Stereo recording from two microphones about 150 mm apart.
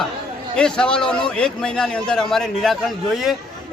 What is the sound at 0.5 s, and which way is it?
A man's voice, 5° left (ahead or behind).